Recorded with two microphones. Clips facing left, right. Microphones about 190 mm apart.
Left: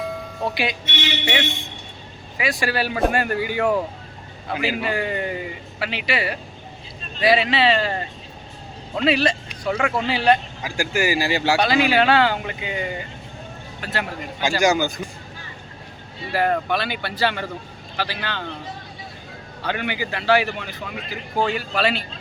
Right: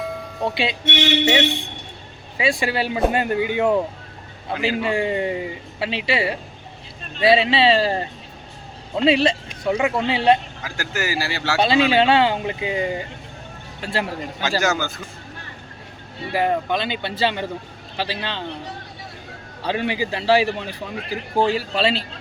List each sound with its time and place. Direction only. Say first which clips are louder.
0.0 s music: right 1 dB; centre (ahead or behind)
0.5 s a man's voice: right 3 dB; 25° right (ahead or behind)
10.6 s speech: left 4 dB; 10° left (ahead or behind)
11.6 s a man's voice: right 4 dB; 25° right (ahead or behind)
14.6 s speech: left 7 dB; 15° left (ahead or behind)
16.3 s a man's voice: even; 15° right (ahead or behind)
19.6 s a man's voice: right 3 dB; 30° right (ahead or behind)